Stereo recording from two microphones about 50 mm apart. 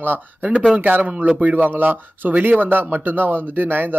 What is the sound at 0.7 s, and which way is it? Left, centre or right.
Speech, right.